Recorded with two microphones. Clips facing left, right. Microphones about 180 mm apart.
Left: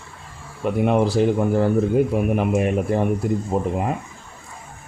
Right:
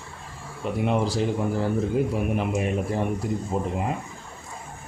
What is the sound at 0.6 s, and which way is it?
Speech, 55° left (ahead or behind).